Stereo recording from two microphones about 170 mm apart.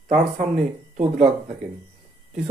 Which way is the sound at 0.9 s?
45° right (ahead or behind).